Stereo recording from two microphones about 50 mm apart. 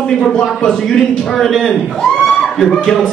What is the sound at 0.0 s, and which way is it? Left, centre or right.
A man's voice, centre.